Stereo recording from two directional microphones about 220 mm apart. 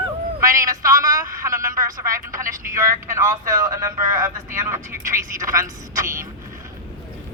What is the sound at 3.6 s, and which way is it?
Speech, 15° right (ahead or behind).